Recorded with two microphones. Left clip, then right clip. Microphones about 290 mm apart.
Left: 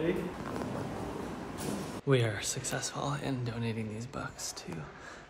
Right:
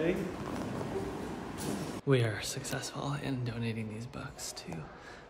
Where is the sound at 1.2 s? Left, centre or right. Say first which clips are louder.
Even; centre.